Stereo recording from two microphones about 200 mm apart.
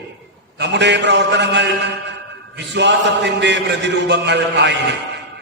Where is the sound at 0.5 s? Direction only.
60° right (ahead or behind).